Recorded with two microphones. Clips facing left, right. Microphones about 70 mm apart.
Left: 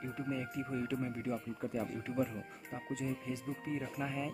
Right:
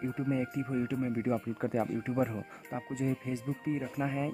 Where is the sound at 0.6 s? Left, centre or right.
Centre.